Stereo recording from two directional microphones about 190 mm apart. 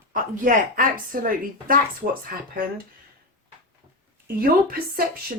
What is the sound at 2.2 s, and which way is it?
Speech, 50° right (ahead or behind).